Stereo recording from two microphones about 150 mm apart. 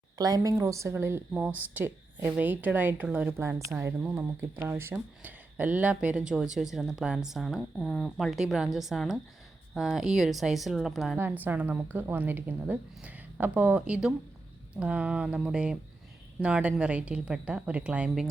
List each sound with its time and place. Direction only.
0.2 s a woman's voice: 25° right (ahead or behind); by 11.2 s centre (ahead or behind)
11.2 s a woman's voice: 10° right (ahead or behind)